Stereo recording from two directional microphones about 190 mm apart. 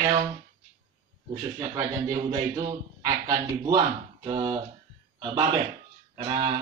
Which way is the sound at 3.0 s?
20° right (ahead or behind).